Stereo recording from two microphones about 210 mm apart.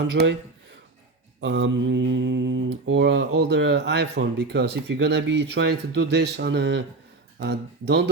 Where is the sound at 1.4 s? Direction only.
60° right (ahead or behind).